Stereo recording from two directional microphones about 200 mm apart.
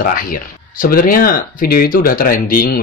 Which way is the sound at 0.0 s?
45° left (ahead or behind).